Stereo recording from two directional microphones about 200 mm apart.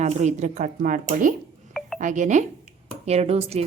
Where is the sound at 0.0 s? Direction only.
35° right (ahead or behind).